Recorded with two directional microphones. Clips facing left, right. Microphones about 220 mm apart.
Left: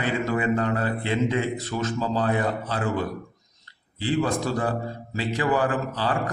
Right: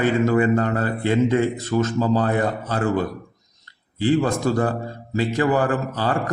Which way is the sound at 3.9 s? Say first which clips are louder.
Right 5 dB; 45° right (ahead or behind).